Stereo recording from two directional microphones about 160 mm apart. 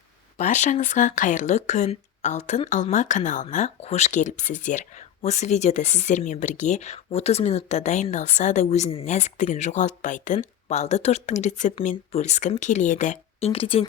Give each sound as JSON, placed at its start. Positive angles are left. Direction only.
{"t": 0.3, "sound": "speech", "side_deg": 50}